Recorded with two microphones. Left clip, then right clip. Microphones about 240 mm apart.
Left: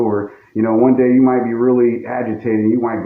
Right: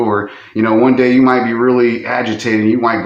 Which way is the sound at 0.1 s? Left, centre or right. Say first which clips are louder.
Right 4 dB; right.